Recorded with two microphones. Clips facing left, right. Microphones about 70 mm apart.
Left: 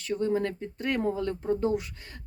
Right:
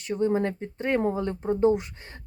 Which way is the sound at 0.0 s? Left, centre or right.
Right.